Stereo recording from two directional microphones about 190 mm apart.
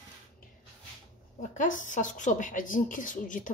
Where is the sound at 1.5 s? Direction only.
40° left (ahead or behind).